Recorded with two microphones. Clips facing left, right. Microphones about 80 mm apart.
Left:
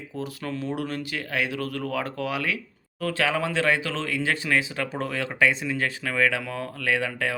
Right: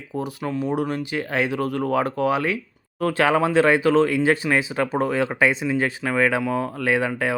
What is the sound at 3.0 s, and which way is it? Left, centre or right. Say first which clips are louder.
Speech: right 6 dB; right.